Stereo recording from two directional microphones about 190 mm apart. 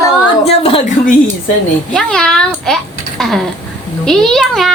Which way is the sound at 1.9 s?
5° left (ahead or behind).